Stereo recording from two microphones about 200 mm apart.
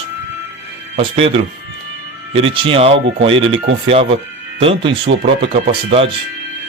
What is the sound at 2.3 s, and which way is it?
Speech, 25° right (ahead or behind).